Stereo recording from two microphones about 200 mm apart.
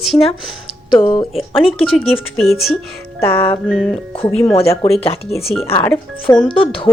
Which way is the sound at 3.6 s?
5° left (ahead or behind).